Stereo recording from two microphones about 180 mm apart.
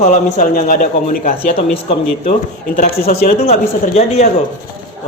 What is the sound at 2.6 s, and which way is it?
Speech, 50° left (ahead or behind).